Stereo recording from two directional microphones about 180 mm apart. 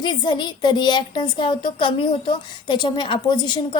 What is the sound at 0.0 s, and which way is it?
Speech, 25° left (ahead or behind).